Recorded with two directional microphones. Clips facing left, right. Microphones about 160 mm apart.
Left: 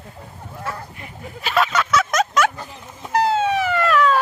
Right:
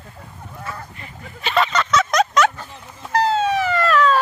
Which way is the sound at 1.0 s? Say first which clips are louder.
Left 3 dB; 5° left (ahead or behind).